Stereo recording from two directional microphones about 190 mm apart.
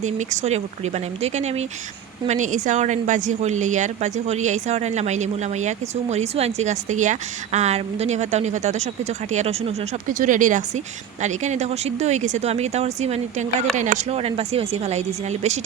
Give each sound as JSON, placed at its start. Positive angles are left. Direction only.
{"t": 0.0, "sound": "a woman's voice", "side_deg": -40}